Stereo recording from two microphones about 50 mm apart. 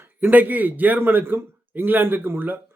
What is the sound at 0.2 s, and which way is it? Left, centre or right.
Speech, right.